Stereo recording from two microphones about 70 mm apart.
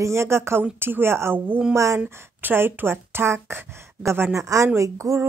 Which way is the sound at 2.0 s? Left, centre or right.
Right.